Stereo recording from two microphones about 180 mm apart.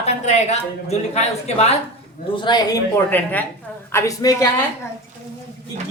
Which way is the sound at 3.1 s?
10° left (ahead or behind).